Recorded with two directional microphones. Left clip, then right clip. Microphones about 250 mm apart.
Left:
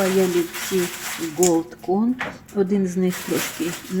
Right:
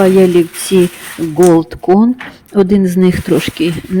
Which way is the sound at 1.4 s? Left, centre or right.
Right.